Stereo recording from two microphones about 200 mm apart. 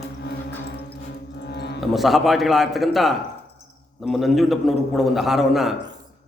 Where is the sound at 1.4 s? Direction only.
55° left (ahead or behind).